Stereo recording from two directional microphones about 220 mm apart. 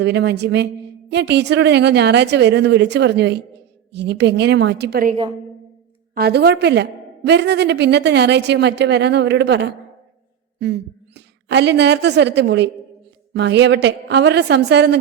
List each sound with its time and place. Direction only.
0.0 s a woman's voice: 50° right (ahead or behind)
6.1 s a woman's voice: 50° right (ahead or behind)